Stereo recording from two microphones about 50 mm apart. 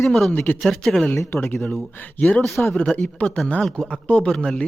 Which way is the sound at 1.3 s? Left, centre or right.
Left.